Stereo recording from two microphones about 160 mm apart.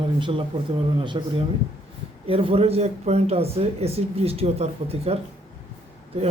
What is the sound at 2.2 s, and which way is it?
Speech, 35° right (ahead or behind).